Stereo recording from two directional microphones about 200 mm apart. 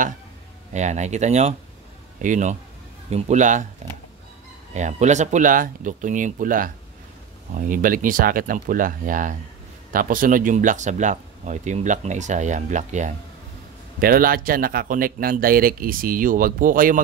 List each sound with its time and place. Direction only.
0.7 s speech: 35° right (ahead or behind)
4.7 s speech: 35° right (ahead or behind)